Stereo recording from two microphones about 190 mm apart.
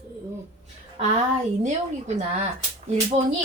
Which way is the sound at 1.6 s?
35° right (ahead or behind).